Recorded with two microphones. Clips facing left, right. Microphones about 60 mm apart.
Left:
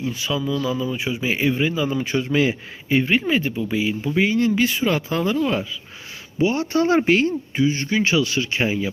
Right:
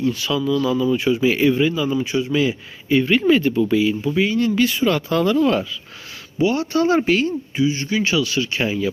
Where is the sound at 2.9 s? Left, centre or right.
Left.